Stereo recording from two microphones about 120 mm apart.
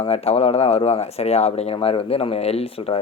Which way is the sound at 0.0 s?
55° left (ahead or behind).